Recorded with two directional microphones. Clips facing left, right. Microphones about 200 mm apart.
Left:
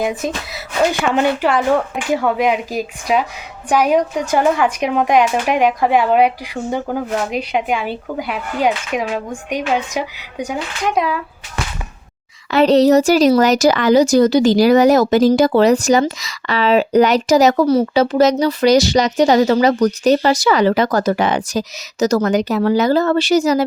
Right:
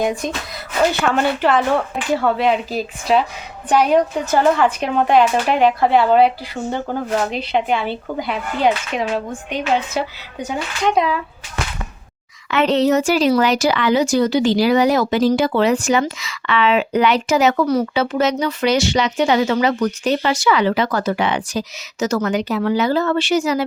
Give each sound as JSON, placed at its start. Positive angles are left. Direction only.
{"t": 0.0, "sound": "speech", "side_deg": 5}
{"t": 12.5, "sound": "speech", "side_deg": 35}